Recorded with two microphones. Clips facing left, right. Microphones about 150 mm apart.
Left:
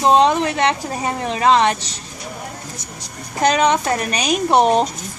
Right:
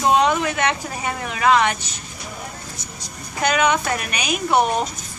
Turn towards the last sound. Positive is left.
turn(degrees=30)  # may be behind; listen again after turning